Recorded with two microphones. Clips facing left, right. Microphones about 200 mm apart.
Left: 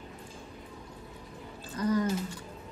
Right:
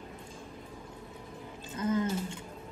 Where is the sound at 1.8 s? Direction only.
25° right (ahead or behind).